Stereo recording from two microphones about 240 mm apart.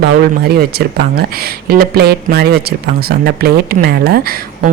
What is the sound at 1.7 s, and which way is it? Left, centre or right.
Speech, right.